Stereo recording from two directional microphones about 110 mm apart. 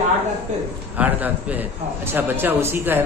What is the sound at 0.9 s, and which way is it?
A man's voice, 15° right (ahead or behind).